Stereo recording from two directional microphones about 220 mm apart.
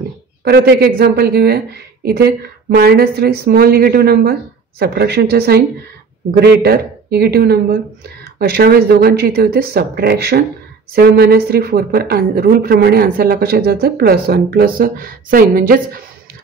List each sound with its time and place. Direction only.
0.4 s speech: 45° right (ahead or behind)